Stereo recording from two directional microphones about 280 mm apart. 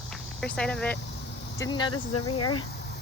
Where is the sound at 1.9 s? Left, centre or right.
Left.